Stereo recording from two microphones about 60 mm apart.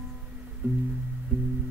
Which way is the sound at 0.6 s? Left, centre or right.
Right.